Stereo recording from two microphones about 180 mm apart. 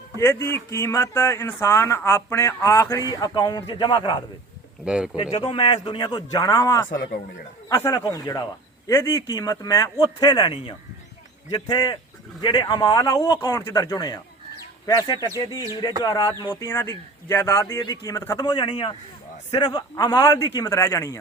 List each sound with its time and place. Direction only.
0.2 s a man's voice: 15° left (ahead or behind)
4.9 s speech: 5° right (ahead or behind)
5.1 s a man's voice: 30° left (ahead or behind)
6.9 s a man's voice: 55° left (ahead or behind)
7.7 s a man's voice: 20° left (ahead or behind)
15.3 s speech: 20° right (ahead or behind)
16.0 s a man's voice: 25° left (ahead or behind)